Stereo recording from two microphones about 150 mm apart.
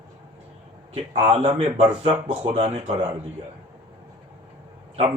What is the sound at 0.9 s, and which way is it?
A man's voice, 40° right (ahead or behind).